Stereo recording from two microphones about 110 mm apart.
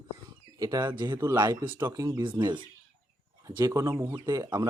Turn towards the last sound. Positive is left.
turn(degrees=-35)  # may be behind; listen again after turning